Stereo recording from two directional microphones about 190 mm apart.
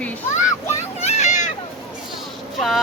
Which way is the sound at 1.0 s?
35° left (ahead or behind).